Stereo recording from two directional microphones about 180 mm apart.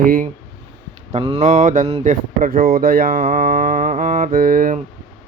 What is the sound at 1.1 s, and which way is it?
Speech, 35° right (ahead or behind).